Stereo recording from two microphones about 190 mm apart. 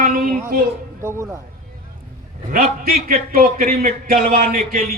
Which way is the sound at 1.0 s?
15° right (ahead or behind).